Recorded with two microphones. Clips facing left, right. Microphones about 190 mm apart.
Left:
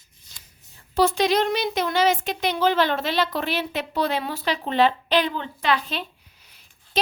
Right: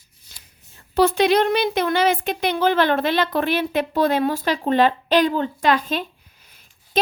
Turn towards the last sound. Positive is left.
turn(degrees=-50)  # may be behind; listen again after turning